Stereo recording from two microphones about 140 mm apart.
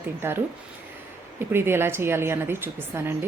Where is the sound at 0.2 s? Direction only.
15° right (ahead or behind).